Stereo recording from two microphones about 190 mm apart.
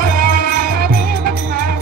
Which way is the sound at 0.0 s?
50° right (ahead or behind).